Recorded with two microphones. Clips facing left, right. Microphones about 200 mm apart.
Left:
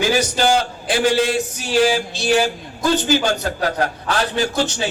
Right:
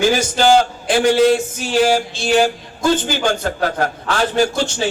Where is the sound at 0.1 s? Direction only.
50° right (ahead or behind).